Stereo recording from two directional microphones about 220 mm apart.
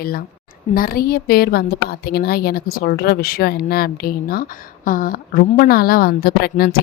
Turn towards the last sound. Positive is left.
turn(degrees=45)  # may be behind; listen again after turning